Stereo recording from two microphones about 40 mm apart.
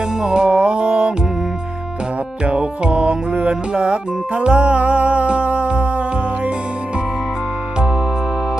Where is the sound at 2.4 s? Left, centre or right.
Right.